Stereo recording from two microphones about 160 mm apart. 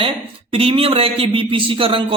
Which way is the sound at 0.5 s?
35° right (ahead or behind).